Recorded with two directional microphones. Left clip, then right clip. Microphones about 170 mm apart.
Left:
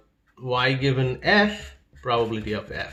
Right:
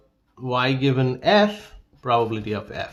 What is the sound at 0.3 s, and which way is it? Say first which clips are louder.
Speech: right 1 dB; 25° right (ahead or behind).